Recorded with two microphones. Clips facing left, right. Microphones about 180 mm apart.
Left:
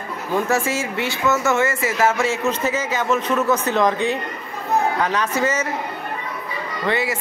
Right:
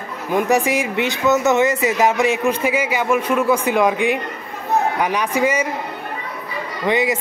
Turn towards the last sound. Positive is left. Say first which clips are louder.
# right 4 dB
turn(degrees=-15)  # may be behind; listen again after turning